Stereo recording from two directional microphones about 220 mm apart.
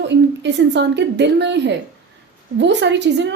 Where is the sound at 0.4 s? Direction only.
55° right (ahead or behind).